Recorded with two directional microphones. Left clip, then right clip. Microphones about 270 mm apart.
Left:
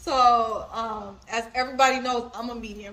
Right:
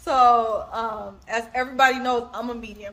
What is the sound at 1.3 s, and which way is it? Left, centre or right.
A woman's voice, centre.